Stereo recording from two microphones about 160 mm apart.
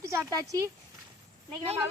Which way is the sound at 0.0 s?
20° right (ahead or behind).